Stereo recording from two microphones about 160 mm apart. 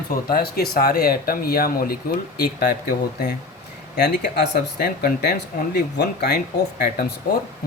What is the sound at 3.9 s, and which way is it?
Speech, 90° left.